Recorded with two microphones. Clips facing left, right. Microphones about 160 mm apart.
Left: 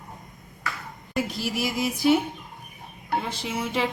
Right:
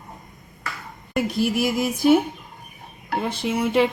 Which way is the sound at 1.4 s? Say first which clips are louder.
Right 9 dB; 55° right (ahead or behind).